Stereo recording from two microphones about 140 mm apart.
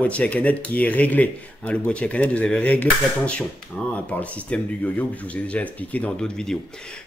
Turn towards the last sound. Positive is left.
turn(degrees=5)  # may be behind; listen again after turning